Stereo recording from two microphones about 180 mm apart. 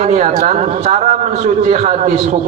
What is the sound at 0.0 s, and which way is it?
A man's voice, 40° right (ahead or behind).